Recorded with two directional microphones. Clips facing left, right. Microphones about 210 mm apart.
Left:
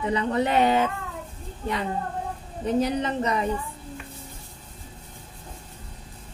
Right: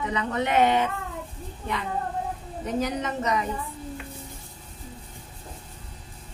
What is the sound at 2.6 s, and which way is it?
Speech, 30° left (ahead or behind).